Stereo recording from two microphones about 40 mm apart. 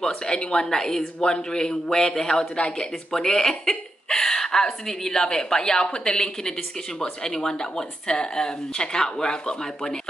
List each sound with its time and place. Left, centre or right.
0.0 s a man's voice: centre